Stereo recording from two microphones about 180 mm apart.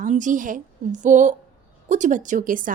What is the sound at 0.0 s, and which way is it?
A woman's voice, 45° right (ahead or behind).